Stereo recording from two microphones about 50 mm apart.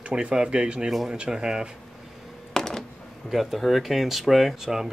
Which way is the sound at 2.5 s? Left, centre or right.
Centre.